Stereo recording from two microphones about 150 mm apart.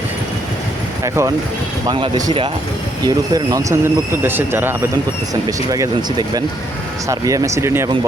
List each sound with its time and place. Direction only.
1.0 s speech: 20° right (ahead or behind)